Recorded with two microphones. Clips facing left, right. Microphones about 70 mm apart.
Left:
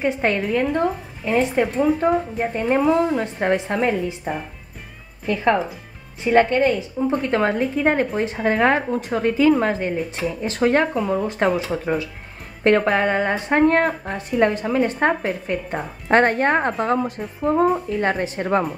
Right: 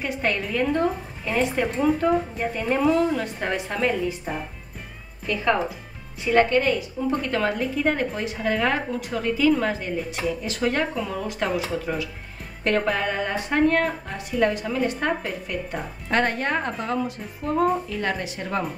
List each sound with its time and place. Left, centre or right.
0.0 s a woman's voice: left
0.7 s speech: centre
1.2 s a woman's voice: left
12.6 s a woman's voice: left
17.4 s a woman's voice: left